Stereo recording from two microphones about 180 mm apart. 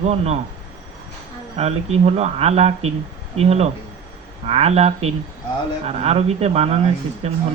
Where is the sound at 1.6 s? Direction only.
35° right (ahead or behind).